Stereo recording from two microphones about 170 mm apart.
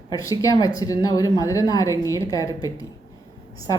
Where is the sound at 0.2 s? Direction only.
20° left (ahead or behind).